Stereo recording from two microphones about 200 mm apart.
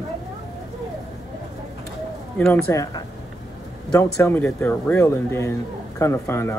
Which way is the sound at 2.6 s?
15° left (ahead or behind).